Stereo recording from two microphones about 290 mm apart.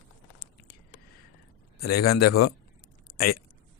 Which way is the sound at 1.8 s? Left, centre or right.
Left.